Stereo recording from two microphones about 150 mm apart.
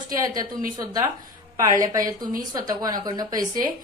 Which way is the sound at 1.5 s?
25° right (ahead or behind).